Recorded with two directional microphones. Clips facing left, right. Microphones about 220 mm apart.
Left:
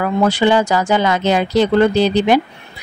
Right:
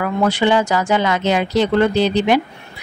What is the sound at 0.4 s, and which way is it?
Speech, 35° left (ahead or behind).